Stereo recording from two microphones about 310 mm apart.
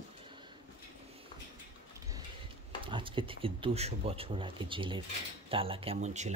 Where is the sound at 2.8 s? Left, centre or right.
Centre.